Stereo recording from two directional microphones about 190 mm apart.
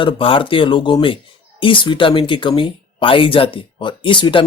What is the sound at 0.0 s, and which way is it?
Speech, 30° left (ahead or behind).